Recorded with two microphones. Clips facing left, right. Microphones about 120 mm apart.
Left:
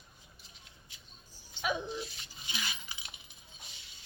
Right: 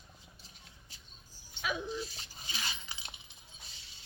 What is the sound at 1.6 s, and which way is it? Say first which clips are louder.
Dog: left 3 dB; 20° left (ahead or behind).